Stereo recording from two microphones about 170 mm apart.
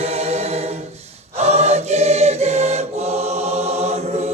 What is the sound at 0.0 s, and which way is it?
Choir, 35° right (ahead or behind).